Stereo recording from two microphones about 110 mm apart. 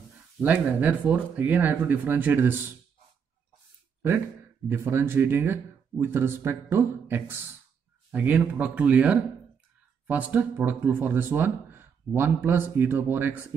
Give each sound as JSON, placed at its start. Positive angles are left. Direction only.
{"t": 0.4, "sound": "speech", "side_deg": -15}
{"t": 4.6, "sound": "speech", "side_deg": -20}